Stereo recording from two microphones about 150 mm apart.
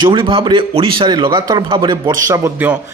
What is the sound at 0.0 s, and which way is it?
A man's voice, 35° right (ahead or behind).